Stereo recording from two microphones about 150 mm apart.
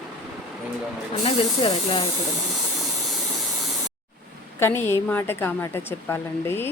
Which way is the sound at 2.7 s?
Centre (ahead or behind).